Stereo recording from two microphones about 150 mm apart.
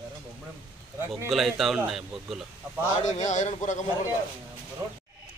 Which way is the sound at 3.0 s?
55° left (ahead or behind).